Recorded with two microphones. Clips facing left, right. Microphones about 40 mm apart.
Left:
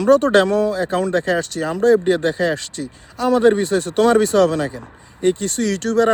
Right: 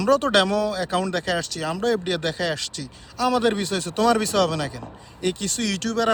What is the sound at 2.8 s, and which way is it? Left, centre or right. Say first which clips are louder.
Speech: left 2 dB; left.